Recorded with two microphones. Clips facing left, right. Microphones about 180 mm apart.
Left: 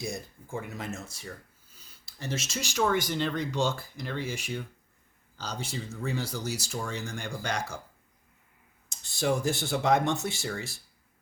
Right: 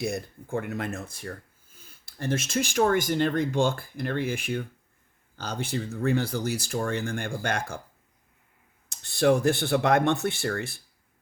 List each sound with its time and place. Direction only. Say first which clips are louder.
0.0 s speech: right 6 dB; 60° right (ahead or behind)
8.9 s speech: right 7 dB; 60° right (ahead or behind)